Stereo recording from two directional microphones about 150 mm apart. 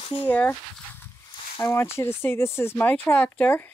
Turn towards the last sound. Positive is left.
turn(degrees=10)  # may be behind; listen again after turning